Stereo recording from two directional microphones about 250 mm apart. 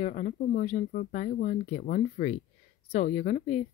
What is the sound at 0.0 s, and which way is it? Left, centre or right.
Speech, left.